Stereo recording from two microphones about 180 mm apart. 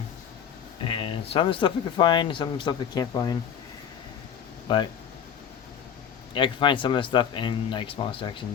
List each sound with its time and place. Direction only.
0.9 s speech: 30° left (ahead or behind)
6.3 s speech: 25° left (ahead or behind)